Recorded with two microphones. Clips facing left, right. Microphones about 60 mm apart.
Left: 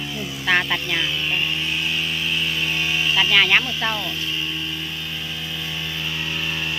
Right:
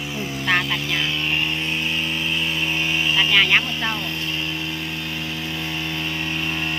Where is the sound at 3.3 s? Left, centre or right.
Centre.